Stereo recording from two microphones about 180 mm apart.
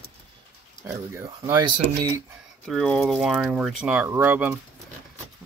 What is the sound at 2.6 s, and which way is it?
Speech, centre (ahead or behind).